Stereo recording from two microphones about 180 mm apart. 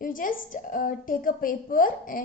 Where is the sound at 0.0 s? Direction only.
50° left (ahead or behind).